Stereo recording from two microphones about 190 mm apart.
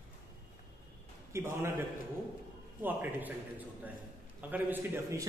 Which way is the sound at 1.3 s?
15° right (ahead or behind).